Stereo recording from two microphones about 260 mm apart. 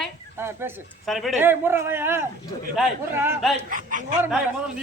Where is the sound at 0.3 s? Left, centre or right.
Centre.